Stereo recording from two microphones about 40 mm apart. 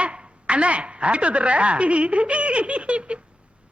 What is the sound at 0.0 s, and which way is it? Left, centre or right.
A man's voice, right.